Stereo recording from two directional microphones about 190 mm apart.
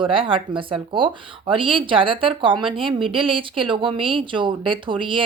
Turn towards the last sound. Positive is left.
turn(degrees=-25)  # may be behind; listen again after turning